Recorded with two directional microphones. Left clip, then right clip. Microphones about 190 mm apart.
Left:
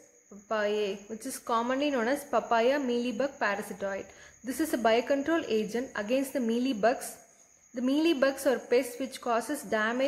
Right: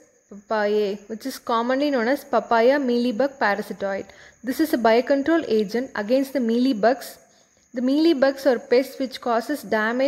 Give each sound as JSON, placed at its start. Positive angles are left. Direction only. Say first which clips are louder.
{"t": 0.5, "sound": "a woman's voice", "louder": "right 8 dB", "side_deg": -30}